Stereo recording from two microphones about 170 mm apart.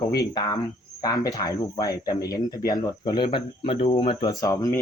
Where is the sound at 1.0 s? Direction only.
20° left (ahead or behind).